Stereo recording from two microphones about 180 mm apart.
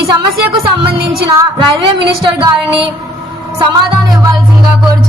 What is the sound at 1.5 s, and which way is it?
Speech, 25° right (ahead or behind).